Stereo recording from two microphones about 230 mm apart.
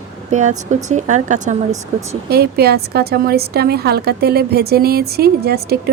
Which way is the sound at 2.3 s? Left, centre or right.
Right.